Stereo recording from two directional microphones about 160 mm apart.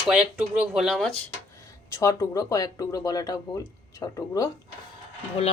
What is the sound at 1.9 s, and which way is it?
Speech, 20° left (ahead or behind).